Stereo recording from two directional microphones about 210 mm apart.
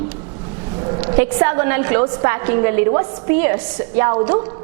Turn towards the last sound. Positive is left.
turn(degrees=-10)  # may be behind; listen again after turning